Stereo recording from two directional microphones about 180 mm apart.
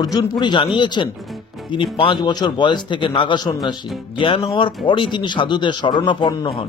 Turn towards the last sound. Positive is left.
turn(degrees=20)  # may be behind; listen again after turning